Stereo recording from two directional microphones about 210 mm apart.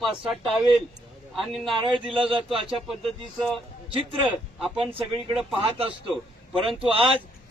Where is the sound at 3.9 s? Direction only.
25° right (ahead or behind).